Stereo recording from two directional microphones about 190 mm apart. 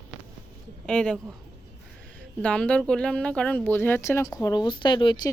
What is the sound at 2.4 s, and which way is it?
Speech, 5° left (ahead or behind).